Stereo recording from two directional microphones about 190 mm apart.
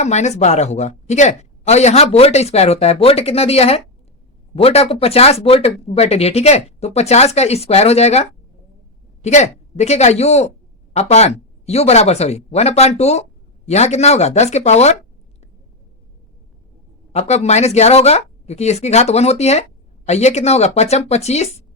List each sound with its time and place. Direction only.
0.0 s a woman's voice: 35° left (ahead or behind)
17.1 s a woman's voice: 35° left (ahead or behind)